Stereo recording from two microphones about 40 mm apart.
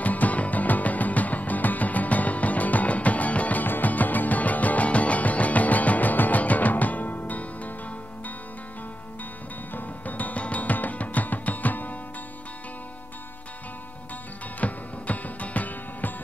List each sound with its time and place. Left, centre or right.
0.0 s music: left
3.6 s music: left
9.8 s music: left
14.6 s music: left